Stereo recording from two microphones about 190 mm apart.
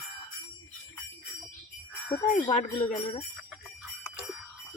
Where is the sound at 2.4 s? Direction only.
30° left (ahead or behind).